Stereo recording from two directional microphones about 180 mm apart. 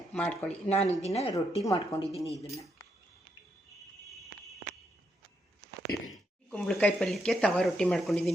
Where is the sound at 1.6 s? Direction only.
20° left (ahead or behind).